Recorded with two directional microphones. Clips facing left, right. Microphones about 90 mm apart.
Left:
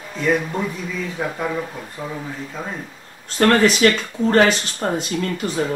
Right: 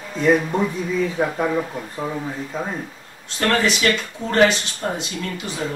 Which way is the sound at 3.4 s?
40° left (ahead or behind).